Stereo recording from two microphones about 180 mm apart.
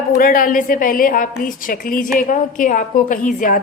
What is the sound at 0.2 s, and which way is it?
A woman's voice, 50° left (ahead or behind).